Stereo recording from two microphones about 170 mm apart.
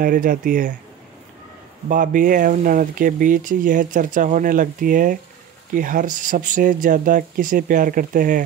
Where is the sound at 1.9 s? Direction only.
50° right (ahead or behind).